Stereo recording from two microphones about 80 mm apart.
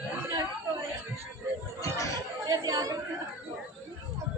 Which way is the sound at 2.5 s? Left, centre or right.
Right.